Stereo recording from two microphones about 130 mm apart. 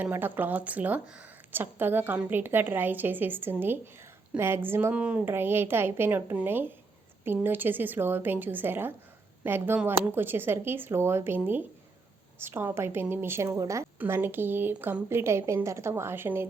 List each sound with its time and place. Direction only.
0.0 s a woman's voice: 15° right (ahead or behind)